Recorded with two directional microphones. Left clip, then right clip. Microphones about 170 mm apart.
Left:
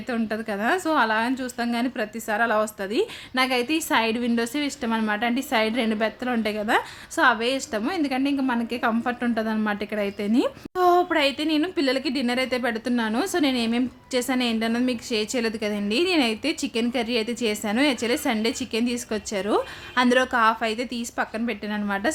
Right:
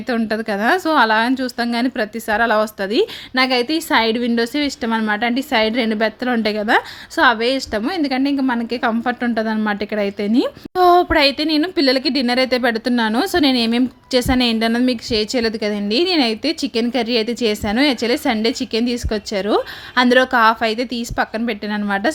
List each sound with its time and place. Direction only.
0.1 s a woman's voice: 35° right (ahead or behind)